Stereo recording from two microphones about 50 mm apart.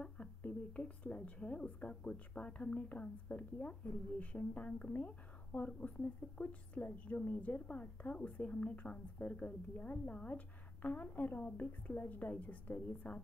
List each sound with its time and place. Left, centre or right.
0.4 s speech: left
5.7 s a woman's voice: left